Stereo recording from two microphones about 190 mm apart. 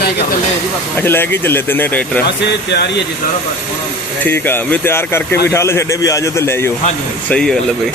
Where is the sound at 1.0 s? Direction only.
10° left (ahead or behind).